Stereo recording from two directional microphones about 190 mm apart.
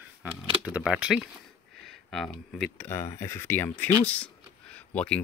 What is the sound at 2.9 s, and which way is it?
Speech, 15° left (ahead or behind).